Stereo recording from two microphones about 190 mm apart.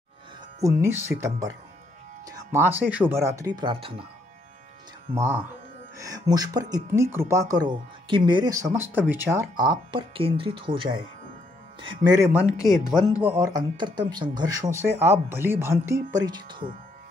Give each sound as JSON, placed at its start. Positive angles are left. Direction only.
{"t": 0.7, "sound": "speech", "side_deg": -15}
{"t": 5.1, "sound": "speech", "side_deg": -15}
{"t": 12.2, "sound": "speech", "side_deg": -10}
{"t": 13.6, "sound": "speech", "side_deg": -25}